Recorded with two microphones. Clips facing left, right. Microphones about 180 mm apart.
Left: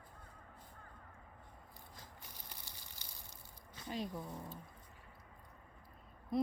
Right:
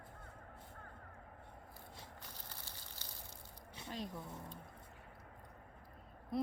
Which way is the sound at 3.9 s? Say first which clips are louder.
Left 3 dB; 5° left (ahead or behind).